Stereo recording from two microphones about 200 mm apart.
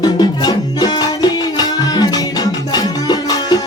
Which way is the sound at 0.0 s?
20° left (ahead or behind).